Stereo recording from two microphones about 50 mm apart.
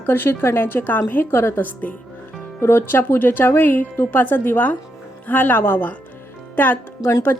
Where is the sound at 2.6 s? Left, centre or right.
Left.